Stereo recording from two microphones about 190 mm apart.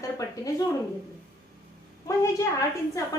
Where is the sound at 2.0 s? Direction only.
15° left (ahead or behind).